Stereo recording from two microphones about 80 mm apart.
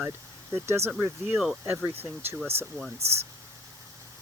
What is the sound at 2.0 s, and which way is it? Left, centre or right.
Speech, right.